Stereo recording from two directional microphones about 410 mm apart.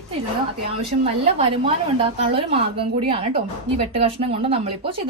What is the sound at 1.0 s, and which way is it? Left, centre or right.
Speech, centre.